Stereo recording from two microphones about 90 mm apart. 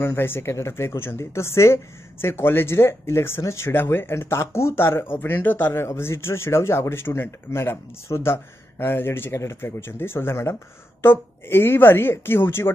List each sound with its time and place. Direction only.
0.0 s speech: 25° left (ahead or behind)